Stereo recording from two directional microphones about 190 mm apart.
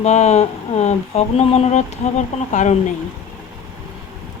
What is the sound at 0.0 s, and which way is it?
Mantra, 35° left (ahead or behind).